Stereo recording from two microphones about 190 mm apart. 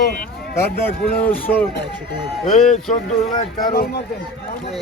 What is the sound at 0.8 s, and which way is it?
Speech, 10° left (ahead or behind).